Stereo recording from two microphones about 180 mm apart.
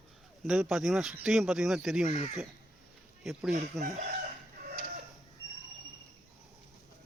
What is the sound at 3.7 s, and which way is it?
Speech, 45° right (ahead or behind).